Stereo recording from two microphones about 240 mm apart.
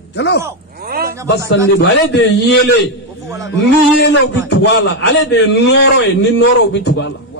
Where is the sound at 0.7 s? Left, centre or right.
Right.